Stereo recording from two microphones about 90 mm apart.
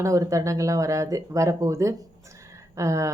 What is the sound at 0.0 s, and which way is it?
Speech, 35° right (ahead or behind).